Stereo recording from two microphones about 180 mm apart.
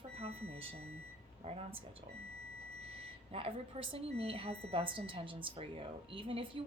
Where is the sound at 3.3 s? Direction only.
30° right (ahead or behind).